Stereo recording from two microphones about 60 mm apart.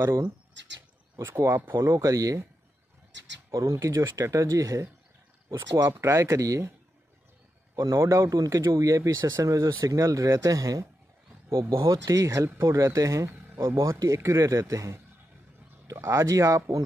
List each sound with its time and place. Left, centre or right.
1.2 s speech: right
2.0 s speech: right
3.5 s speech: right
5.9 s speech: right
7.7 s speech: right
8.3 s speech: right
12.4 s speech: right
13.6 s speech: right
16.0 s speech: right
16.3 s speech: right